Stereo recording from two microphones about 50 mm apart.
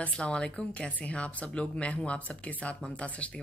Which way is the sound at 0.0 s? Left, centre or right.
Left.